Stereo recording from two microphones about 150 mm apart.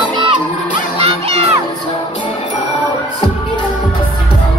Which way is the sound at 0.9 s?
40° right (ahead or behind).